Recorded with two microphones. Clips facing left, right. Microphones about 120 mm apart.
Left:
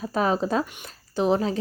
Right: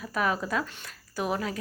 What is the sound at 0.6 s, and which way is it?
Speech, 15° left (ahead or behind).